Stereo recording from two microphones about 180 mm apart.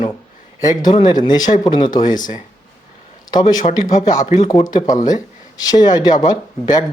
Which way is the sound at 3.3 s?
20° left (ahead or behind).